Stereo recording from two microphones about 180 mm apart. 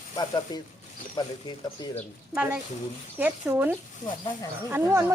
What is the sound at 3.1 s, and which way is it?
Speech, 10° right (ahead or behind).